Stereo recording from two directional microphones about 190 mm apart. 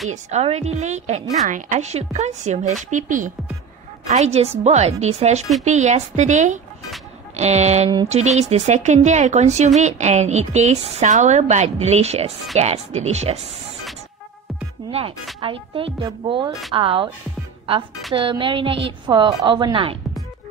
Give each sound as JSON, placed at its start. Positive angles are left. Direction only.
{"t": 0.1, "sound": "a woman's voice", "side_deg": -35}
{"t": 14.9, "sound": "a woman's voice", "side_deg": -30}
{"t": 18.1, "sound": "a woman's voice", "side_deg": -25}